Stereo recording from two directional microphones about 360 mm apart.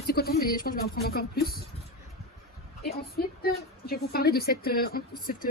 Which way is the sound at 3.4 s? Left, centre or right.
Left.